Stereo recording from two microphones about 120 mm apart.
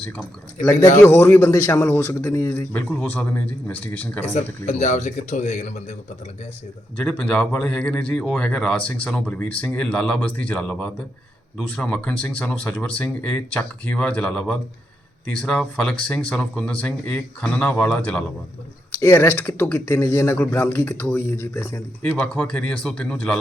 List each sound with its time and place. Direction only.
0.7 s a man's voice: 25° left (ahead or behind)
4.3 s speech: 70° left (ahead or behind); by 5.7 s 85° left
6.9 s speech: 10° left (ahead or behind)
18.9 s a man's voice: 20° left (ahead or behind)